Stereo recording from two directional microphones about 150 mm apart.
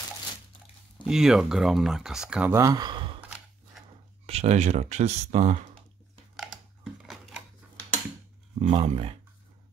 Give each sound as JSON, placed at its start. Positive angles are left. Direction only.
{"t": 1.0, "sound": "speech", "side_deg": -5}
{"t": 2.5, "sound": "speech", "side_deg": -25}
{"t": 3.2, "sound": "a sound", "side_deg": -10}
{"t": 4.3, "sound": "speech", "side_deg": -45}
{"t": 6.3, "sound": "a sound", "side_deg": -5}
{"t": 8.5, "sound": "speech", "side_deg": -45}